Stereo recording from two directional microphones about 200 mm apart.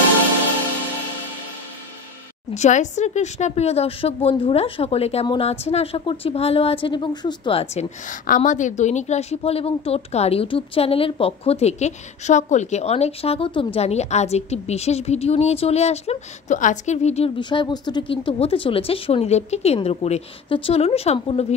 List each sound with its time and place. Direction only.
2.5 s speech: 35° left (ahead or behind)